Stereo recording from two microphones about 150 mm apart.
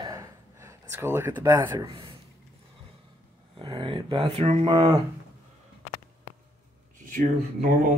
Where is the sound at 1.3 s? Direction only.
30° right (ahead or behind).